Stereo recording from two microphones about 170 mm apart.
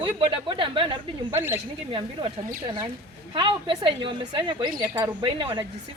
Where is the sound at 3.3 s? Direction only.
30° right (ahead or behind).